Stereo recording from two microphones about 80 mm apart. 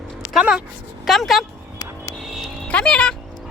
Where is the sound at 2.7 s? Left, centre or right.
Centre.